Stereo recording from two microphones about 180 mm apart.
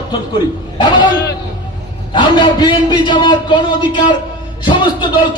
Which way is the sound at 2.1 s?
25° left (ahead or behind).